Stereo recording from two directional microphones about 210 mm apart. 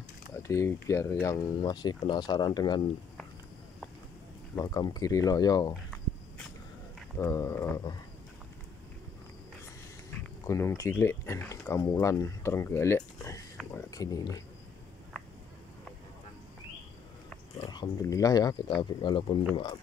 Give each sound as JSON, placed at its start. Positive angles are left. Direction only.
{"t": 0.4, "sound": "speech", "side_deg": 15}
{"t": 4.6, "sound": "speech", "side_deg": 15}
{"t": 7.2, "sound": "speech", "side_deg": 15}
{"t": 10.1, "sound": "speech", "side_deg": 15}
{"t": 17.6, "sound": "speech", "side_deg": 20}